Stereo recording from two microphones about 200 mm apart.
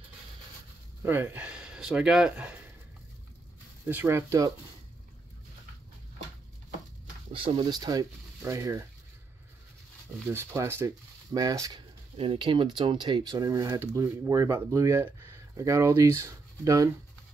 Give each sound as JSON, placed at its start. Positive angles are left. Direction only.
{"t": 1.0, "sound": "speech", "side_deg": -10}
{"t": 3.8, "sound": "speech", "side_deg": -10}
{"t": 7.3, "sound": "speech", "side_deg": -25}
{"t": 10.2, "sound": "speech", "side_deg": -15}